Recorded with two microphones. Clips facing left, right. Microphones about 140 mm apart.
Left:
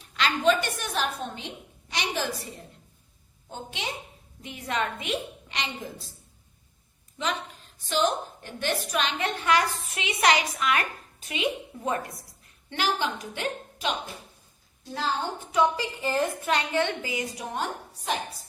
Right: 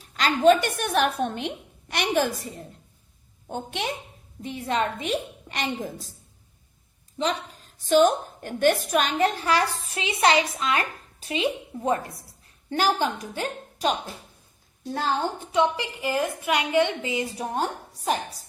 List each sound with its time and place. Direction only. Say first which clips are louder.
0.0 s a woman's voice: right 5 dB; 40° right (ahead or behind)
3.5 s a woman's voice: right 6 dB; 55° right (ahead or behind)
4.4 s a woman's voice: right 4 dB; 30° right (ahead or behind)
7.2 s a sound: right 4 dB; 35° right (ahead or behind)
7.9 s a woman's voice: right 7 dB; 50° right (ahead or behind); by 12.2 s 30° right (ahead or behind)
12.7 s a woman's voice: right 4 dB; 45° right (ahead or behind)
15.5 s a woman's voice: even; 15° right (ahead or behind)
17.4 s a woman's voice: right 4 dB; 40° right (ahead or behind)